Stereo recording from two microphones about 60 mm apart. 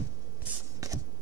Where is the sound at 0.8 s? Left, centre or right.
Right.